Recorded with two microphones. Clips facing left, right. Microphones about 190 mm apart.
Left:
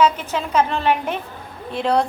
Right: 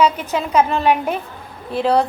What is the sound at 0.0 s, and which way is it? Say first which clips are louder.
A woman's voice: right 1 dB; 10° right (ahead or behind).